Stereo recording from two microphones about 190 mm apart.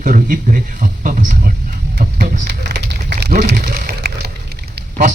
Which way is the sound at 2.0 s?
50° right (ahead or behind).